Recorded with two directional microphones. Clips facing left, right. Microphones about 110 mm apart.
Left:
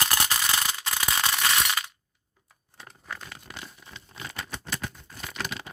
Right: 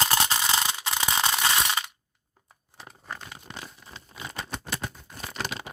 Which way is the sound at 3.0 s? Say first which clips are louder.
Even; 15° right (ahead or behind).